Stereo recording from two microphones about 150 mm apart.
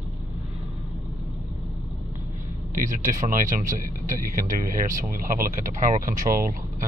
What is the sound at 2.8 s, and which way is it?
Speech, 60° right (ahead or behind).